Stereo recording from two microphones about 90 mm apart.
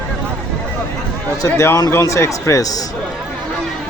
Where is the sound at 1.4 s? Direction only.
35° left (ahead or behind).